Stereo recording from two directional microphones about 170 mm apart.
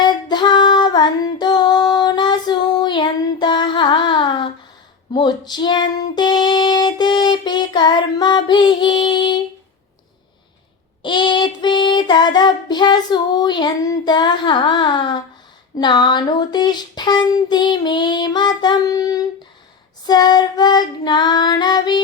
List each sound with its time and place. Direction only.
0.0 s female singing: 25° left (ahead or behind)
11.0 s child singing: 30° left (ahead or behind)